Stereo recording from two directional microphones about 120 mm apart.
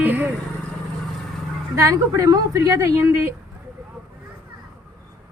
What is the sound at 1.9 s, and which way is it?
Speech, 25° right (ahead or behind).